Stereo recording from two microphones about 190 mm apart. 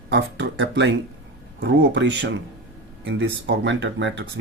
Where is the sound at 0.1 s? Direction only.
75° right (ahead or behind).